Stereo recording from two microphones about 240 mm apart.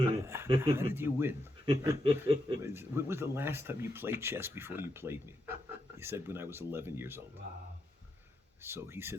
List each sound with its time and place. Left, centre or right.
0.1 s speech: centre
8.6 s speech: centre